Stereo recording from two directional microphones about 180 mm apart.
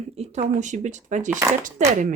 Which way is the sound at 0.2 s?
35° right (ahead or behind).